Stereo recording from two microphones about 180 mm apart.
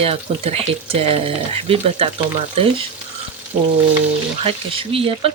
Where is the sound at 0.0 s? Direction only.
35° right (ahead or behind).